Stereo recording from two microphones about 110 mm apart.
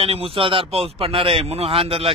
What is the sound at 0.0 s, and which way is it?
A man's voice, 65° right (ahead or behind).